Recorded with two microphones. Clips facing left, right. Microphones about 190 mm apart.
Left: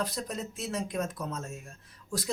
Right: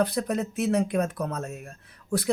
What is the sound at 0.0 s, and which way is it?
Speech, 65° right (ahead or behind).